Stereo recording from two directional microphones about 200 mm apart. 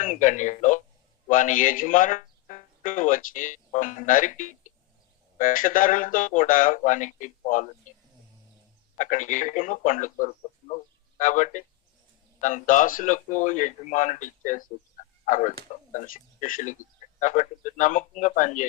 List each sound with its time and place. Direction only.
0.0 s speech: 40° left (ahead or behind)
9.0 s speech: 40° left (ahead or behind)